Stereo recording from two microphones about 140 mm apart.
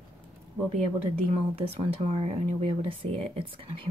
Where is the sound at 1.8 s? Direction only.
45° right (ahead or behind).